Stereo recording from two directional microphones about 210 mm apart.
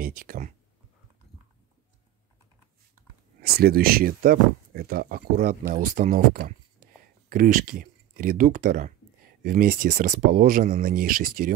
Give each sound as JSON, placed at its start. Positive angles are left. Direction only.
{"t": 0.0, "sound": "speech", "side_deg": -40}
{"t": 3.4, "sound": "speech", "side_deg": -45}